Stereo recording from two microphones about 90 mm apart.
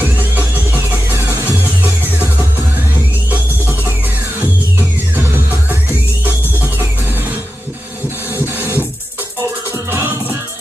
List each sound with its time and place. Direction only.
4.4 s music: 20° right (ahead or behind)
8.5 s music: 20° right (ahead or behind)